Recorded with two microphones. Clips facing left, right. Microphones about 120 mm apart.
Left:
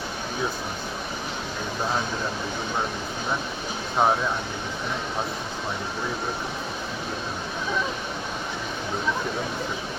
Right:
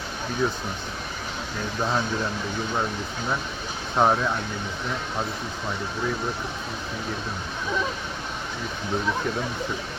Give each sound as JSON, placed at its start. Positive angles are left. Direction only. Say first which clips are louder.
{"t": 4.0, "sound": "speech", "louder": "right 1 dB", "side_deg": 10}